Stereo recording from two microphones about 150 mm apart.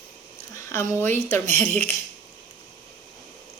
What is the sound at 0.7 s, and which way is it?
Speech, 15° left (ahead or behind).